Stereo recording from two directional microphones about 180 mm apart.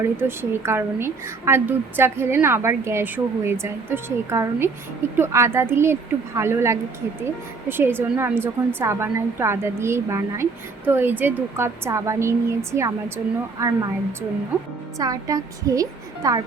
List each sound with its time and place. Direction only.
0.0 s a woman's voice: 15° right (ahead or behind)